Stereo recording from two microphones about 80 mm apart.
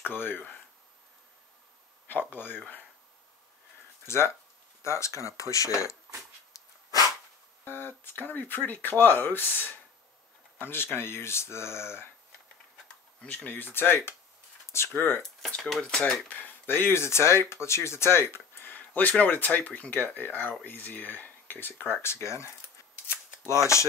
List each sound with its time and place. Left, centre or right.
0.0 s speech: left
2.0 s speech: left
4.1 s speech: left
6.5 s dog: left
7.6 s speech: left
13.2 s speech: centre
15.8 s speech: centre
16.3 s speech: left
23.7 s speech: left